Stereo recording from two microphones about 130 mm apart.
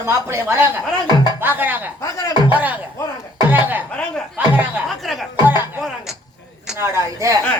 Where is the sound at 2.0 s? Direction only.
25° left (ahead or behind).